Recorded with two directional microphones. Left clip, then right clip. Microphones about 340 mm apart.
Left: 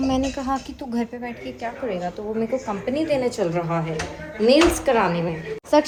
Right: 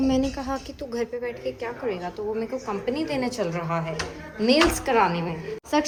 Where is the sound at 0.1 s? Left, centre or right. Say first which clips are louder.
Left 2 dB; centre.